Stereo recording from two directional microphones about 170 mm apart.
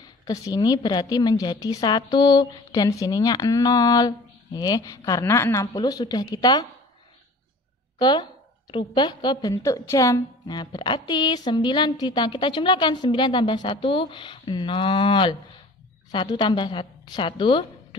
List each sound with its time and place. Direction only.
0.0 s a woman's voice: 20° left (ahead or behind)
8.0 s a woman's voice: 25° left (ahead or behind)